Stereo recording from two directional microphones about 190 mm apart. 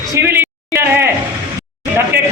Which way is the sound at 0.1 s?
10° right (ahead or behind).